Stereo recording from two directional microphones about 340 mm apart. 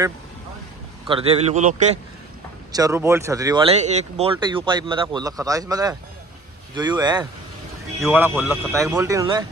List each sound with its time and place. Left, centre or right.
1.0 s speech: centre
2.7 s speech: centre